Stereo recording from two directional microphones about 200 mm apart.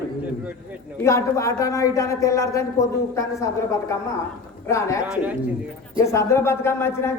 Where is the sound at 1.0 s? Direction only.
15° left (ahead or behind).